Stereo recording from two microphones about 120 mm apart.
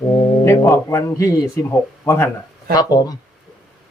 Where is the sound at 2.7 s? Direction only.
35° left (ahead or behind).